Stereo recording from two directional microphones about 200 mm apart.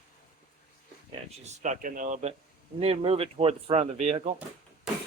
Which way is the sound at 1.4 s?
35° right (ahead or behind).